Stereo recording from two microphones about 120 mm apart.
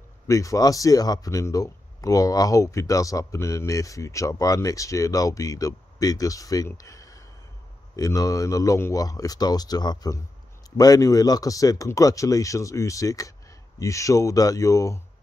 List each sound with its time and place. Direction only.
0.3 s speech: 25° left (ahead or behind)